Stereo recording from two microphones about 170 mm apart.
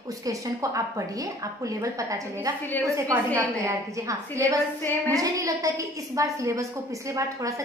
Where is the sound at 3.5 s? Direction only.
20° right (ahead or behind).